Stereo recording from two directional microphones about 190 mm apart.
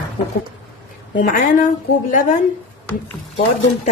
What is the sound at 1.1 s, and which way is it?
A woman's voice, 45° left (ahead or behind).